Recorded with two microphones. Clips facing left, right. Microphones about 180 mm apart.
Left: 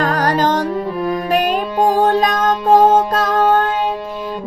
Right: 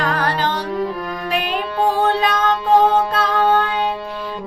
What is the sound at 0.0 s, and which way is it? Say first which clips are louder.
Music: left 4 dB; 40° left (ahead or behind).